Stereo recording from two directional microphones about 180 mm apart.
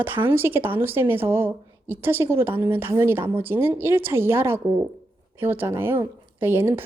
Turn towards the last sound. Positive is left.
turn(degrees=-10)  # may be behind; listen again after turning